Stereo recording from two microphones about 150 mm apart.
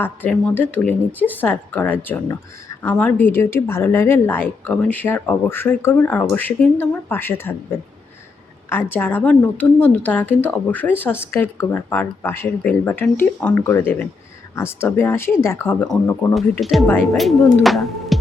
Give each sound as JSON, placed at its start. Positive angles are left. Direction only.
{"t": 0.0, "sound": "a woman's voice", "side_deg": 10}
{"t": 8.9, "sound": "a woman's voice", "side_deg": 15}
{"t": 16.3, "sound": "speech", "side_deg": 0}